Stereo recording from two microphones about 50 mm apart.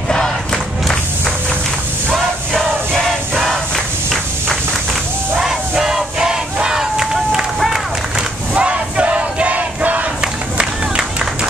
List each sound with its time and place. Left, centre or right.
2.0 s music: centre
5.4 s battle cry: centre
8.5 s battle cry: right
10.2 s music: centre